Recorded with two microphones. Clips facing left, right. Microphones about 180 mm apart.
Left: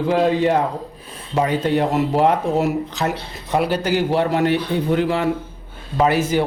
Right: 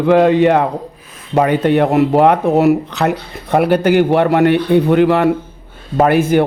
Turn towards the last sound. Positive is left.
turn(degrees=-55)  # may be behind; listen again after turning